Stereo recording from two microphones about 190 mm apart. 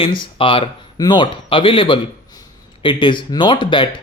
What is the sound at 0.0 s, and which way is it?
Speech, 25° left (ahead or behind).